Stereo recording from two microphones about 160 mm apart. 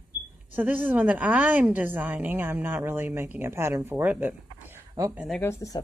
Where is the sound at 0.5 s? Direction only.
10° right (ahead or behind).